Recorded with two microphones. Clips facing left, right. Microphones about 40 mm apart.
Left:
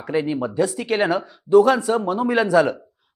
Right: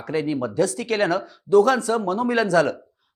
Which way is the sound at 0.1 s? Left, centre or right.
Centre.